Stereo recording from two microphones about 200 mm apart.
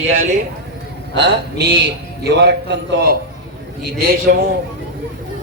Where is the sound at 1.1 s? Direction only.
55° right (ahead or behind).